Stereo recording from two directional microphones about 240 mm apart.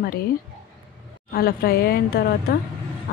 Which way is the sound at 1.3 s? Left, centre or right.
Left.